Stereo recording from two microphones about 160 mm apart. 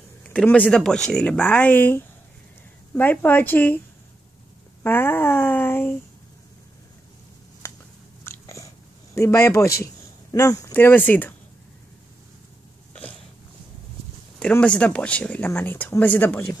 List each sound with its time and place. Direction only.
0.2 s speech: 5° left (ahead or behind)
4.8 s speech: 15° left (ahead or behind)
7.6 s a sound: 20° left (ahead or behind)
8.2 s chewing: 15° left (ahead or behind)
10.3 s speech: 20° left (ahead or behind)
12.9 s a sound: 5° left (ahead or behind)
14.4 s speech: 5° left (ahead or behind)